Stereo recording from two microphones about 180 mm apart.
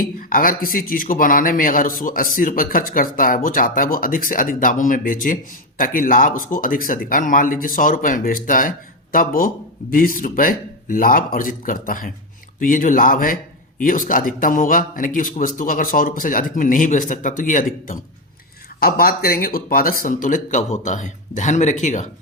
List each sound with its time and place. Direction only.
0.2 s speech: 50° left (ahead or behind)